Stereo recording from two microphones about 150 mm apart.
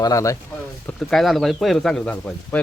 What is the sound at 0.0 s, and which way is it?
Speech, 20° left (ahead or behind).